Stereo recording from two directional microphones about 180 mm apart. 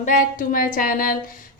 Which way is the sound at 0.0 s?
50° left (ahead or behind).